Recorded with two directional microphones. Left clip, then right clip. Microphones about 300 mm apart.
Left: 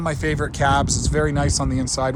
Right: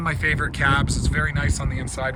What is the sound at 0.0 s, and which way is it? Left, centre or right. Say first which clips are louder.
Speech: right 1 dB; centre.